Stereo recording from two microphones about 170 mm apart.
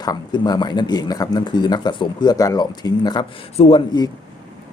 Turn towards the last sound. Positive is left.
turn(degrees=25)  # may be behind; listen again after turning